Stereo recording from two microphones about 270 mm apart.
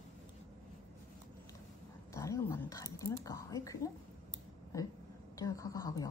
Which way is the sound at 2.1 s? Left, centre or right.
Centre.